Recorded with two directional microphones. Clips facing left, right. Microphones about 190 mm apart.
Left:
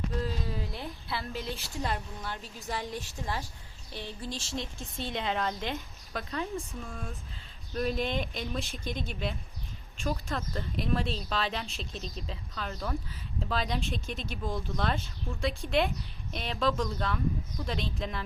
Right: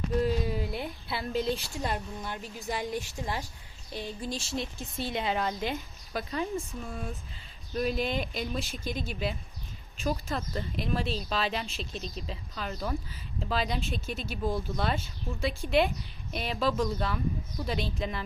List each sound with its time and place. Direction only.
0.2 s a woman's voice: 15° right (ahead or behind)